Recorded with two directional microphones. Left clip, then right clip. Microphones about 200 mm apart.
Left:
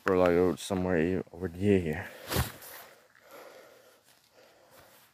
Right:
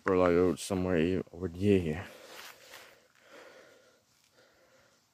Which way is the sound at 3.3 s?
5° left (ahead or behind).